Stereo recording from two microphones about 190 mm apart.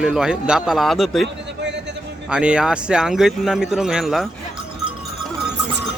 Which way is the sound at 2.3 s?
5° right (ahead or behind).